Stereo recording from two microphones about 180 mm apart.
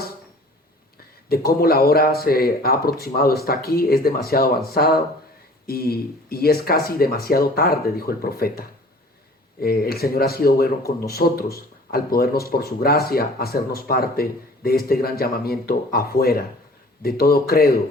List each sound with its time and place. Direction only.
1.3 s speech: 55° left (ahead or behind)